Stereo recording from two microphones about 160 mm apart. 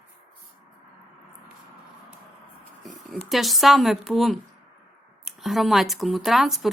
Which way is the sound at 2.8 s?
Centre (ahead or behind).